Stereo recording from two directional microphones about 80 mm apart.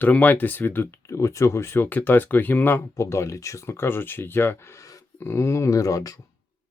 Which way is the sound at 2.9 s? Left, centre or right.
Left.